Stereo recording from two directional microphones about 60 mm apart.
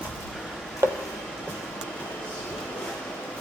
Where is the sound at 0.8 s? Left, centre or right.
Right.